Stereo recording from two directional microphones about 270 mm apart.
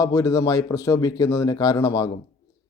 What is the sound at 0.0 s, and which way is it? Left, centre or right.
A man's voice, centre.